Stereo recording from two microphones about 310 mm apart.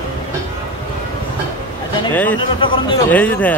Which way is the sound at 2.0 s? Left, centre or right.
Centre.